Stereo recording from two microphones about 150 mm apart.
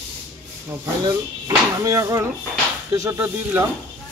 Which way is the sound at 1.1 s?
20° right (ahead or behind).